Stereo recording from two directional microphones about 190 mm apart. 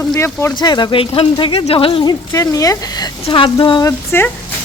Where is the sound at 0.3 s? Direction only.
20° left (ahead or behind).